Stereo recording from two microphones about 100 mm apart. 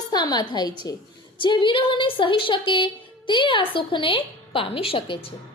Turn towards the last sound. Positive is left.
turn(degrees=65)  # may be behind; listen again after turning